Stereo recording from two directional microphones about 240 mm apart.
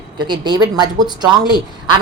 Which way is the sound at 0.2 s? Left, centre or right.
Centre.